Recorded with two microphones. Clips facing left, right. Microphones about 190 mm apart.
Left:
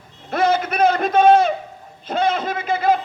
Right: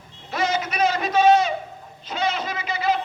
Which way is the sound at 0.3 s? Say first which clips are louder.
Left 6 dB; 55° left (ahead or behind).